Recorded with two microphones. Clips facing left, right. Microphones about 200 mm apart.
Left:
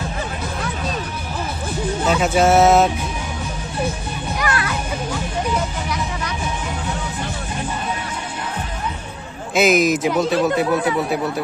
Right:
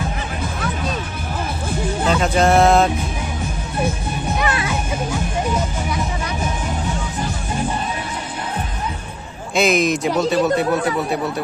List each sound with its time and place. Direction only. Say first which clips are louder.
2.0 s speech: left 1 dB; 5° left (ahead or behind)
4.4 s music: even; 20° right (ahead or behind)
9.6 s speech: left 1 dB; centre (ahead or behind)